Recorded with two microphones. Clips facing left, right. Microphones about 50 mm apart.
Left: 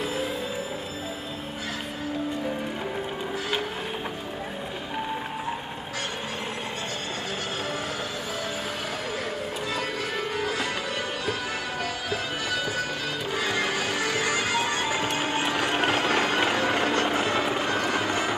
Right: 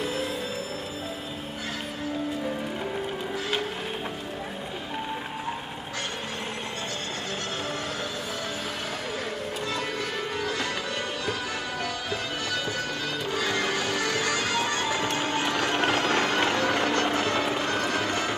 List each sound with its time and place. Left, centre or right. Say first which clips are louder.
10.3 s music: left 1 dB; centre
13.3 s music: even; centre